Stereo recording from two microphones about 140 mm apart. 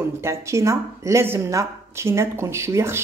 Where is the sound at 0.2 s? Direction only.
20° right (ahead or behind).